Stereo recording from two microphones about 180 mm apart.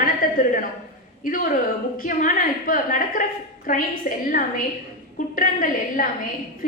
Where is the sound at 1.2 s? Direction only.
50° left (ahead or behind).